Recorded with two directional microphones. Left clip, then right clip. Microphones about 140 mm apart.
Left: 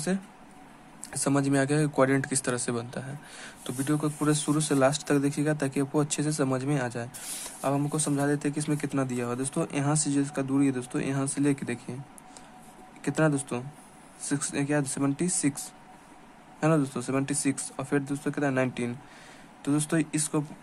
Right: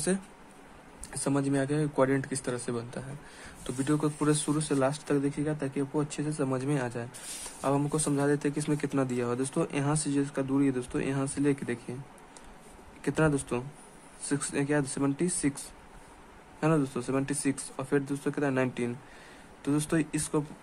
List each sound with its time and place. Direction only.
1.1 s speech: 10° left (ahead or behind)
4.6 s speech: 10° left (ahead or behind)
6.6 s speech: centre (ahead or behind)
13.0 s speech: centre (ahead or behind)